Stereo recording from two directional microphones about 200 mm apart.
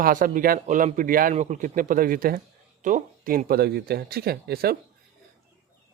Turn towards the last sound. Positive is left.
turn(degrees=-50)  # may be behind; listen again after turning